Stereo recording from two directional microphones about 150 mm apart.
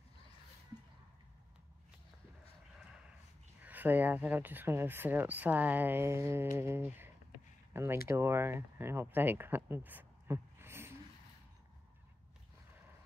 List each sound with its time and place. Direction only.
3.6 s speech: 10° right (ahead or behind)